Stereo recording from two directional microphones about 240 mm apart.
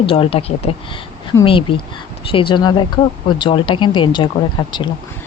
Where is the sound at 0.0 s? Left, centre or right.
Left.